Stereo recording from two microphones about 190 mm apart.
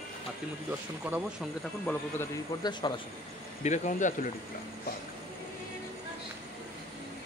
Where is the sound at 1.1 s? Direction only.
5° right (ahead or behind).